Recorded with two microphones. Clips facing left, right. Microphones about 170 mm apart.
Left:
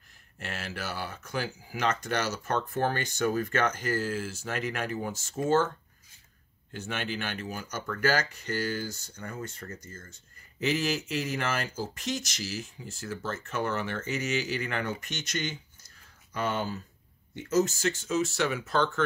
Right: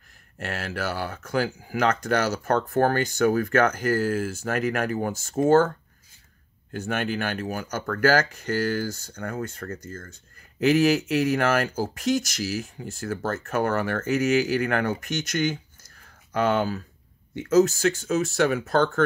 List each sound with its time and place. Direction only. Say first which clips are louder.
0.4 s speech: right 7 dB; 55° right (ahead or behind)
6.7 s speech: right 7 dB; 55° right (ahead or behind)